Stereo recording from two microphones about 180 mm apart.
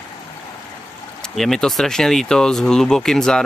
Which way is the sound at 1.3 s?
Centre (ahead or behind).